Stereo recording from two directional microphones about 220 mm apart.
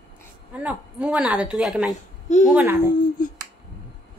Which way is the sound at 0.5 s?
5° right (ahead or behind).